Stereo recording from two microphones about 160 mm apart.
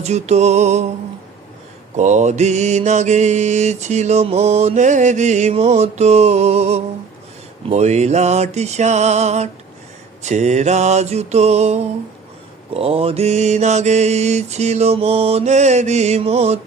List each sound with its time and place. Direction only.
0.0 s mantra: 45° right (ahead or behind)
2.0 s mantra: 45° right (ahead or behind)